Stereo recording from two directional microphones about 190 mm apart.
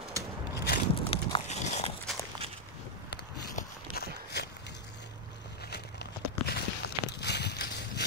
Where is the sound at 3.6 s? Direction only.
55° left (ahead or behind).